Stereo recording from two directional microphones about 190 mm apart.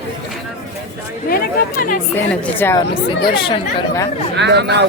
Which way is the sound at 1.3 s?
50° left (ahead or behind).